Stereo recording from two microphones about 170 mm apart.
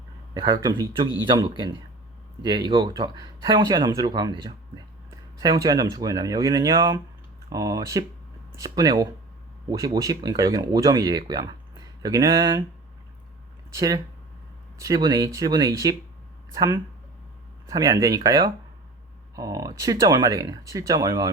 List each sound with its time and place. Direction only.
0.3 s speech: 25° right (ahead or behind)
13.7 s speech: 20° right (ahead or behind)